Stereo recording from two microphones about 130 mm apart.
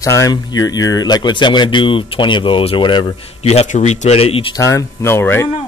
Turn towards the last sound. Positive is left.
turn(degrees=20)  # may be behind; listen again after turning